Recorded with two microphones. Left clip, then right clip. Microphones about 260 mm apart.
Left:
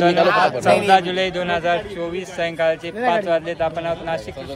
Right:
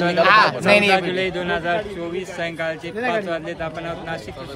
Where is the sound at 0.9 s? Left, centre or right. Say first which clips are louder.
Left 3 dB; centre.